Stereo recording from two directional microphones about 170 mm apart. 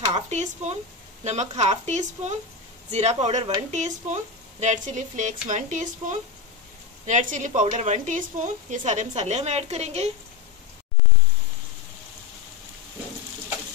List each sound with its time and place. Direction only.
0.0 s a woman's voice: 40° right (ahead or behind)